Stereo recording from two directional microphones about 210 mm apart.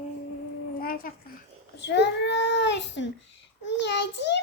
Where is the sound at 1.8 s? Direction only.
55° left (ahead or behind).